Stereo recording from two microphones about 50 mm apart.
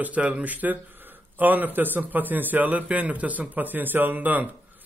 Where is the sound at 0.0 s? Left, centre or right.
Right.